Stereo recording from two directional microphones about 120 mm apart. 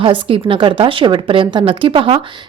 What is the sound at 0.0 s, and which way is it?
A woman's voice, 50° right (ahead or behind).